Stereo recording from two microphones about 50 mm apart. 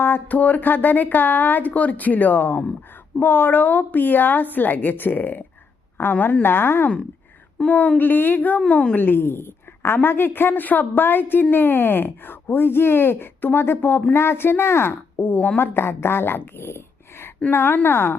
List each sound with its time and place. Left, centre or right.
0.3 s a woman's voice: left
7.7 s speech: left
9.0 s a woman's voice: left
17.5 s a woman's voice: left